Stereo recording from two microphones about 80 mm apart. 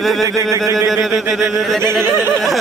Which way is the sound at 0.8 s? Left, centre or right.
Centre.